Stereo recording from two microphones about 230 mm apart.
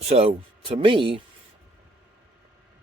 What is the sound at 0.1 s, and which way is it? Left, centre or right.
Speech, right.